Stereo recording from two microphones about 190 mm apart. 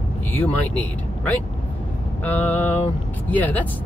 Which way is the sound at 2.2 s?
10° left (ahead or behind).